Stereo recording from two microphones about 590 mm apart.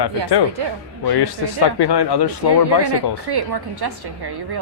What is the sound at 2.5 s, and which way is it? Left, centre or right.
A woman's voice, right.